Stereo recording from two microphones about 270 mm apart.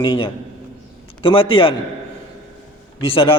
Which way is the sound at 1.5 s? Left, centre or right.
Centre.